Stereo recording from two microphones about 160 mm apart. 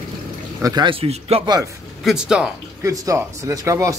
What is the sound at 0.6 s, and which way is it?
Speech, 25° right (ahead or behind).